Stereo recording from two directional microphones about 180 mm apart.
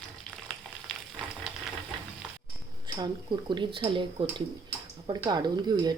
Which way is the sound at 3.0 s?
25° right (ahead or behind).